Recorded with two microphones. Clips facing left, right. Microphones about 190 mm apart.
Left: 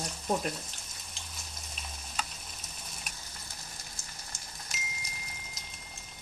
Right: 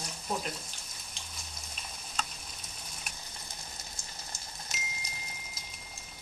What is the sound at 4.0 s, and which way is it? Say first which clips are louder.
Rain: right 1 dB; 5° left (ahead or behind).